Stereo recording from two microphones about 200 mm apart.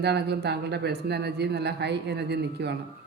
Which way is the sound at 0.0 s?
55° right (ahead or behind).